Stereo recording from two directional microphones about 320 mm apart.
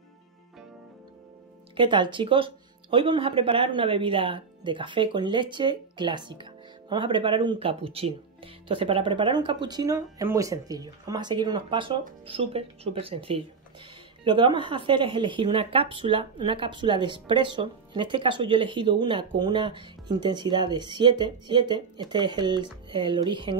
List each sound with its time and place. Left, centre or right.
1.8 s speech: centre